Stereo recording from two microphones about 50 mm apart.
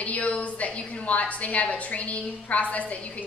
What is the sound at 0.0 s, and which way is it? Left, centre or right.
A woman's voice, left.